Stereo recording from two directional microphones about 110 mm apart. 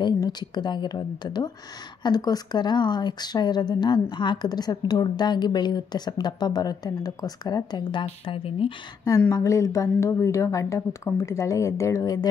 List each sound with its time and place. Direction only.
0.0 s speech: 40° left (ahead or behind); by 8.7 s 55° left (ahead or behind)
9.3 s a woman's voice: 30° left (ahead or behind)